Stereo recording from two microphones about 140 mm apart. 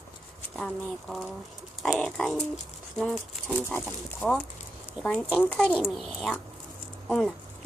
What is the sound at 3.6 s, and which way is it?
Speech, 15° left (ahead or behind).